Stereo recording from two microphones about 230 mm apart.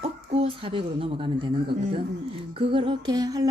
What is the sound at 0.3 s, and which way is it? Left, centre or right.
Speech, right.